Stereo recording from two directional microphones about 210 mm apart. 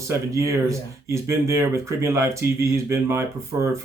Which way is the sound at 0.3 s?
15° right (ahead or behind).